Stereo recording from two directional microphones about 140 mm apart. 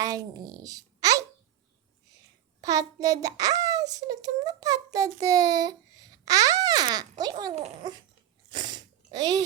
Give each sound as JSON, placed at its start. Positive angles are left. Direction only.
{"t": 0.0, "sound": "a child's voice", "side_deg": -25}
{"t": 2.6, "sound": "a child's voice", "side_deg": -25}
{"t": 8.4, "sound": "a sound", "side_deg": -30}